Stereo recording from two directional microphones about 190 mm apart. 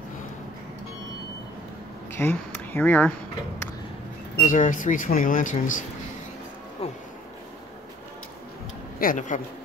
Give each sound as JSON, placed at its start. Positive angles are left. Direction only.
{"t": 2.1, "sound": "speech", "side_deg": 10}
{"t": 4.4, "sound": "speech", "side_deg": 45}
{"t": 6.8, "sound": "a sound", "side_deg": 30}
{"t": 9.0, "sound": "speech", "side_deg": 45}